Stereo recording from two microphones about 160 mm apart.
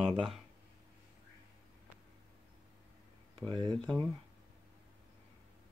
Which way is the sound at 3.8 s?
5° left (ahead or behind).